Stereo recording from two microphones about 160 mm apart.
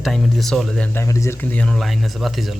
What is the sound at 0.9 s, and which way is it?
Speech, 20° left (ahead or behind).